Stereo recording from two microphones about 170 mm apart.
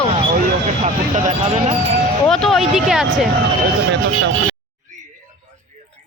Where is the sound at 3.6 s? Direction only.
90° right.